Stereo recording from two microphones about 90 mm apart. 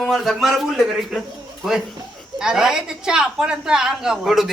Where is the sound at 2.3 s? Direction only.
5° right (ahead or behind).